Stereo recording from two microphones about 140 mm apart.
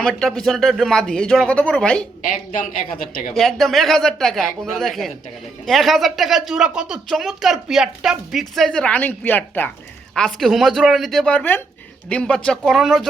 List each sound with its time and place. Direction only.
0.0 s speech: centre (ahead or behind)
2.2 s a man's voice: 85° left
3.3 s speech: centre (ahead or behind)
10.2 s speech: centre (ahead or behind)